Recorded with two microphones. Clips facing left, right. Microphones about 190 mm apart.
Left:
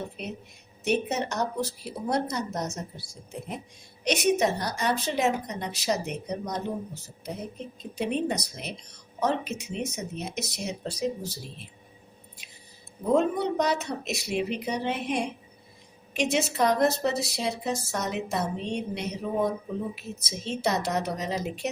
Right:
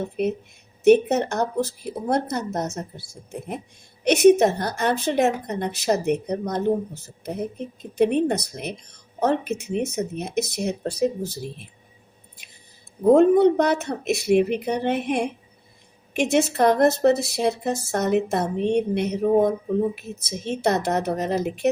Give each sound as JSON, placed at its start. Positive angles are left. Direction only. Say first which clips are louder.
{"t": 0.9, "sound": "speech", "louder": "right 11 dB", "side_deg": -55}
{"t": 4.0, "sound": "a woman's voice", "louder": "right 9 dB", "side_deg": -55}
{"t": 13.1, "sound": "speech", "louder": "right 10 dB", "side_deg": -55}